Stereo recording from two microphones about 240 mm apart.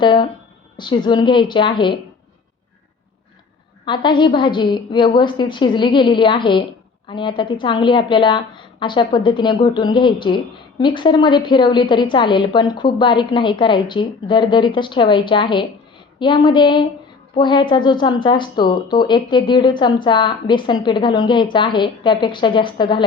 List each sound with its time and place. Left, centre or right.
0.0 s a woman's voice: centre
3.8 s a woman's voice: centre